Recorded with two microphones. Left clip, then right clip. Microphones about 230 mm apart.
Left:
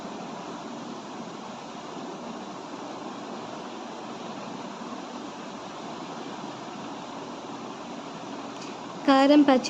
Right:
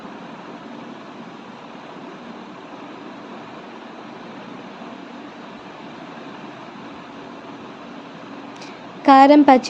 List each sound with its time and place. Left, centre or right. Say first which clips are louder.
9.0 s a woman's voice: right 9 dB; centre